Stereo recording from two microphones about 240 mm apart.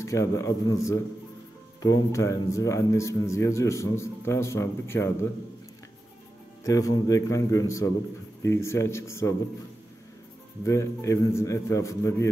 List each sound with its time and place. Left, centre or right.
0.0 s speech: centre
6.6 s speech: centre
10.6 s speech: centre